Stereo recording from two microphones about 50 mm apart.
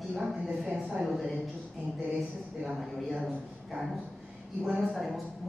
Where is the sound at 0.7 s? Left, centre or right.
Right.